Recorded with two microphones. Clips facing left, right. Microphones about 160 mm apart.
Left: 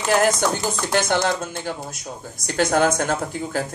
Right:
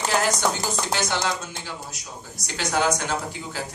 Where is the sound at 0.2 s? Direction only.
50° left (ahead or behind).